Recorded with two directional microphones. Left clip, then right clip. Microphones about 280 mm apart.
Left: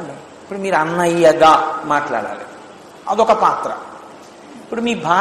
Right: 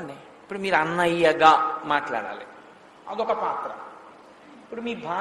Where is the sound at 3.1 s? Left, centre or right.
Centre.